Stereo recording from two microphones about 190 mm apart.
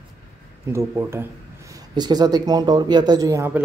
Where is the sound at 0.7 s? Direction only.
15° right (ahead or behind).